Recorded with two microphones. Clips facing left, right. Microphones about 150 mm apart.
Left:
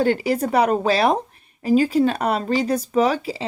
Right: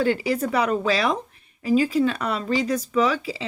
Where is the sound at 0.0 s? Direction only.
35° left (ahead or behind).